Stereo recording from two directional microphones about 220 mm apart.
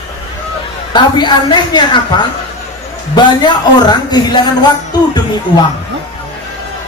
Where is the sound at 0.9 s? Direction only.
20° left (ahead or behind).